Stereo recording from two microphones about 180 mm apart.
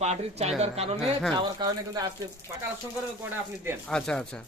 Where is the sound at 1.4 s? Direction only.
25° right (ahead or behind).